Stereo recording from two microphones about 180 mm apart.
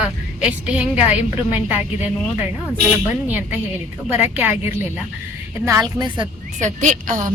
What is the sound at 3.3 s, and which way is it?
A woman's voice, 10° right (ahead or behind).